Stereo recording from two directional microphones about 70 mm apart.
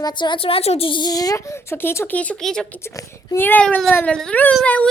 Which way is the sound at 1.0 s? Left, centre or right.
Left.